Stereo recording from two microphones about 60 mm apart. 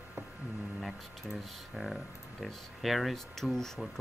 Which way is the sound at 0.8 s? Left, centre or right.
Centre.